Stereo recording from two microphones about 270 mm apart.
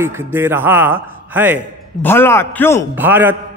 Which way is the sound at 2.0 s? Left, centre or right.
Centre.